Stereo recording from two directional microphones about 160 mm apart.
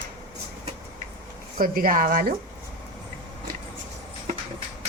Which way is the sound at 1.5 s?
65° right (ahead or behind).